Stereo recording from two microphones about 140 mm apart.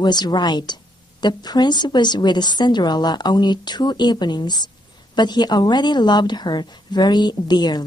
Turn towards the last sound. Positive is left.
turn(degrees=30)  # may be behind; listen again after turning